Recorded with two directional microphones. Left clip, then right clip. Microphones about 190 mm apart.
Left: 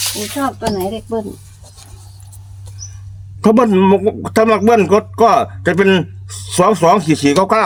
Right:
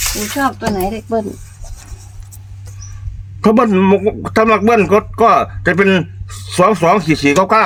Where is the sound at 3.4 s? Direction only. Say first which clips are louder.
Even; 15° left (ahead or behind).